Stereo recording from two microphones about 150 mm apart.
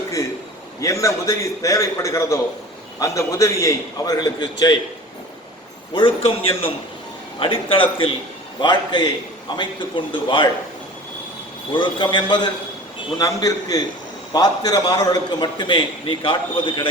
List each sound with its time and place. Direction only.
0.8 s a man's voice: 20° left (ahead or behind)
5.9 s a man's voice: 35° left (ahead or behind)
11.7 s a man's voice: 35° left (ahead or behind)